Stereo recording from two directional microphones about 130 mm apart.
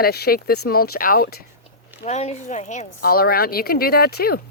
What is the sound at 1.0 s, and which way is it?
Speech, 90° left.